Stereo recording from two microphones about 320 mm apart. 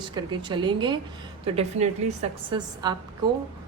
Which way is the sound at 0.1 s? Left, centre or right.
Centre.